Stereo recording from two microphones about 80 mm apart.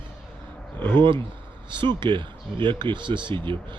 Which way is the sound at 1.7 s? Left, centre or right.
Right.